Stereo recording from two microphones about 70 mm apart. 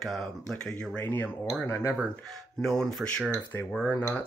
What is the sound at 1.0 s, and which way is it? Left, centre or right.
Speech, left.